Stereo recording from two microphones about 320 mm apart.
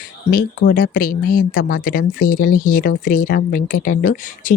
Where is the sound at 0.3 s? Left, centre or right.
Left.